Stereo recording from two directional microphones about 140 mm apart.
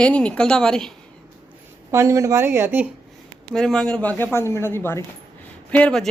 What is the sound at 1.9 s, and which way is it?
Speech, 20° right (ahead or behind).